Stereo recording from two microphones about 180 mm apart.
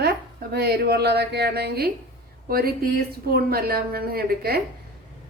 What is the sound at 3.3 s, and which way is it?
A woman's voice, 60° right (ahead or behind).